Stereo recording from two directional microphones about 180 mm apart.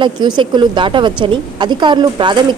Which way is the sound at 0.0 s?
25° right (ahead or behind).